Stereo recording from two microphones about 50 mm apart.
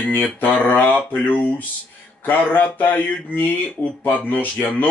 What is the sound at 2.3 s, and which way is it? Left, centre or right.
Speech, left.